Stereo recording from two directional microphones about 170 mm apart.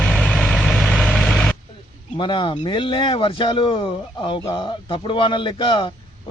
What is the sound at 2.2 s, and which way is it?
A man's voice, 30° left (ahead or behind).